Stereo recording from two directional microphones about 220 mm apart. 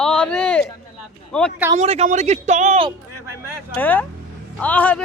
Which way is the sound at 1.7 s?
30° right (ahead or behind).